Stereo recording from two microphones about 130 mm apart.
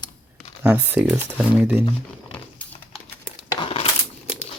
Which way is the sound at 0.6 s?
10° right (ahead or behind).